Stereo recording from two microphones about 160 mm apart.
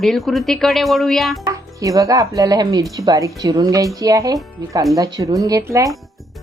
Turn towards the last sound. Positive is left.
turn(degrees=-20)  # may be behind; listen again after turning